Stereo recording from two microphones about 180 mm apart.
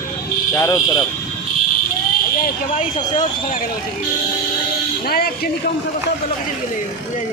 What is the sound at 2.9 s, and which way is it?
Speech, 35° left (ahead or behind).